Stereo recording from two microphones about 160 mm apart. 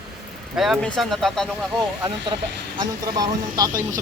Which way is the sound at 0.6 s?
Centre (ahead or behind).